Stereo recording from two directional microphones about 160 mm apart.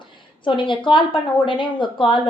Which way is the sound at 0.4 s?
30° left (ahead or behind).